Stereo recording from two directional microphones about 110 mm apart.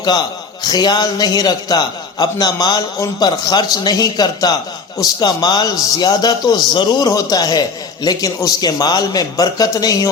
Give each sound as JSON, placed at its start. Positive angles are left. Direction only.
{"t": 0.6, "sound": "speech", "side_deg": 40}